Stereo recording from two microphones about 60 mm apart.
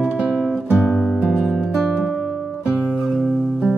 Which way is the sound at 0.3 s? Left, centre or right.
Centre.